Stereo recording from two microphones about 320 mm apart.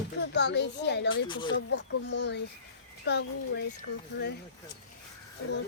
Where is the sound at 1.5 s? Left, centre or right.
Left.